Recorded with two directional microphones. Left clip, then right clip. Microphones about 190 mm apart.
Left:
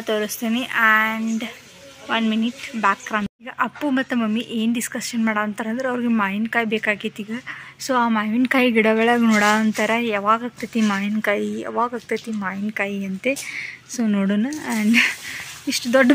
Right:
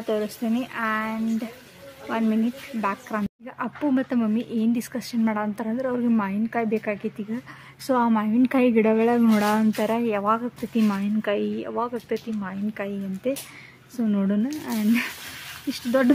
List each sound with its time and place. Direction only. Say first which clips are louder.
0.0 s speech: left 3 dB; 5° left (ahead or behind)